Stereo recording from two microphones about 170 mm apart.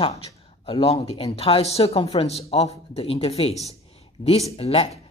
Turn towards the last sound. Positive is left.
turn(degrees=35)  # may be behind; listen again after turning